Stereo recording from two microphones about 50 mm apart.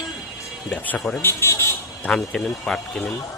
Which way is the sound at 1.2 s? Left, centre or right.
Left.